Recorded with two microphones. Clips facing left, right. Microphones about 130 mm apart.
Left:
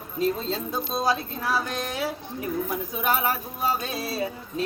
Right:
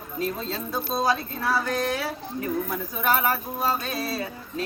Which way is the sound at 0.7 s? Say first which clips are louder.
Right 2 dB; 20° left (ahead or behind).